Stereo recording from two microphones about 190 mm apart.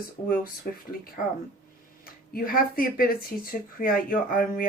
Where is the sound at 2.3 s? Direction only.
50° left (ahead or behind).